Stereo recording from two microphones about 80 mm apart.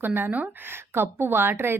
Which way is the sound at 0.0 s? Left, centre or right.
Right.